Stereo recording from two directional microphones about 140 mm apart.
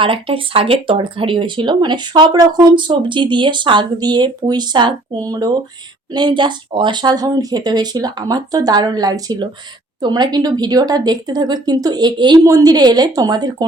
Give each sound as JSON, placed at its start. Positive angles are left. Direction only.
{"t": 0.0, "sound": "a woman's voice", "side_deg": -40}